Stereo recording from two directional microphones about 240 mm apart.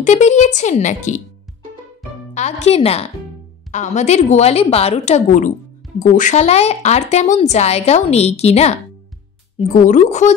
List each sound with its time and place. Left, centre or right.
0.0 s a woman's voice: left
2.3 s a woman's voice: left